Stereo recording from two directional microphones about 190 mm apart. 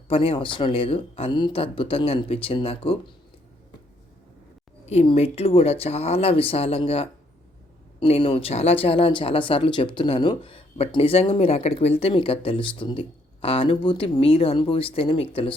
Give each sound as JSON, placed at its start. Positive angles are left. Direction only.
{"t": 0.1, "sound": "speech", "side_deg": 30}
{"t": 4.9, "sound": "speech", "side_deg": 35}